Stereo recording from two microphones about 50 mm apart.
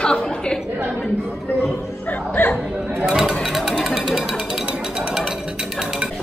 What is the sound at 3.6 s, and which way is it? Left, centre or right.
Speech, centre.